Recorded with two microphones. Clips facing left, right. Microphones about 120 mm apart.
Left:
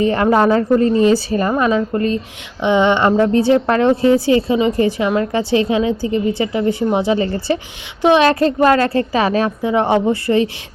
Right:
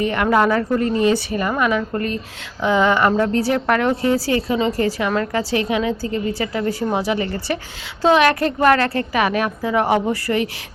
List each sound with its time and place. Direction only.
0.0 s a woman's voice: 30° left (ahead or behind)